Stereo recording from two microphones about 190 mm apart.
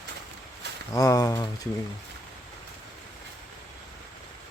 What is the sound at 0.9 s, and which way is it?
Speech, 20° left (ahead or behind).